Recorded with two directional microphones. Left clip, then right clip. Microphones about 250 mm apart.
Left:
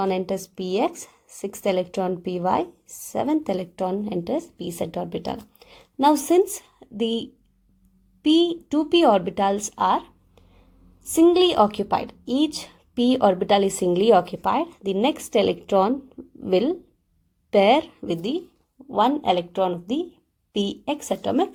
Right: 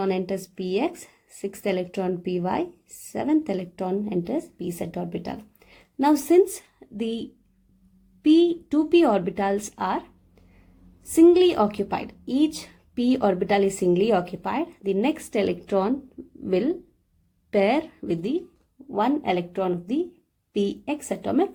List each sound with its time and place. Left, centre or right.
0.0 s a woman's voice: left
11.1 s a woman's voice: left